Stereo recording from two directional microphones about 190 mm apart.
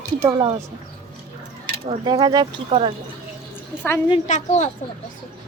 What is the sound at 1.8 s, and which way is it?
Speech, 25° right (ahead or behind).